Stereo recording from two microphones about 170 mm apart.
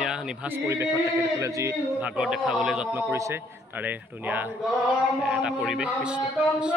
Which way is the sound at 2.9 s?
15° right (ahead or behind).